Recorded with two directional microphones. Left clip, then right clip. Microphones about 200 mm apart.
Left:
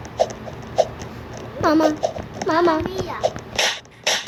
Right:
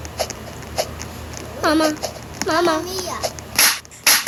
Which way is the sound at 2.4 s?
20° right (ahead or behind).